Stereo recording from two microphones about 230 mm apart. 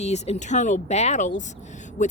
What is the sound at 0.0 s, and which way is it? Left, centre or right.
Speech, left.